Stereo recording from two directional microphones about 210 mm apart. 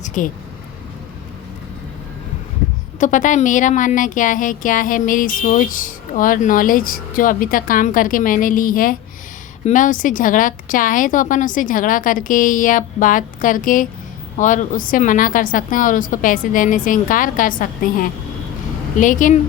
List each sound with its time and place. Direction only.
0.0 s vehicle: 35° left (ahead or behind)
3.0 s speech: 35° left (ahead or behind)